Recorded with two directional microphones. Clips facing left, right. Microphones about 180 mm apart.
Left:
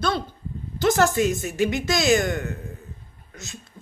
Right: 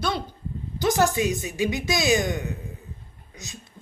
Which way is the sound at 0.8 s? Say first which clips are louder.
Left 2 dB; 15° right (ahead or behind).